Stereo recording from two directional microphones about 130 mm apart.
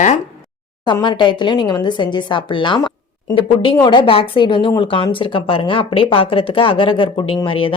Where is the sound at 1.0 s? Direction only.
35° left (ahead or behind).